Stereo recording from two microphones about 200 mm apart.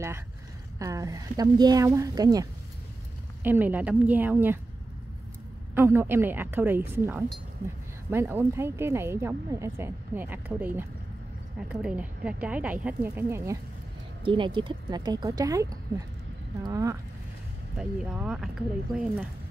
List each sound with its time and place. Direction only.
0.7 s speech: 15° right (ahead or behind)
3.4 s speech: 10° right (ahead or behind)
5.8 s speech: 10° right (ahead or behind)
14.2 s speech: 25° right (ahead or behind)
17.7 s speech: 5° right (ahead or behind)